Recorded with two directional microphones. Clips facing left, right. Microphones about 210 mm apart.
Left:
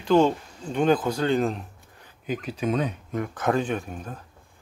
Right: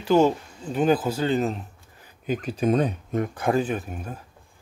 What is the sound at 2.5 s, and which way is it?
Speech, 45° right (ahead or behind).